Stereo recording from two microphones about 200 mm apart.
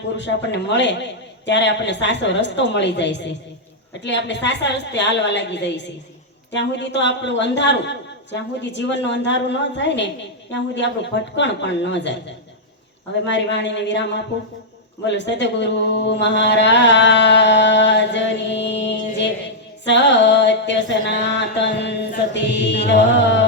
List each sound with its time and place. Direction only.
0.2 s a woman's voice: 60° left (ahead or behind)
13.2 s a woman's voice: 60° left (ahead or behind)
19.8 s a sound: 60° left (ahead or behind)
22.3 s a woman's voice: 60° left (ahead or behind)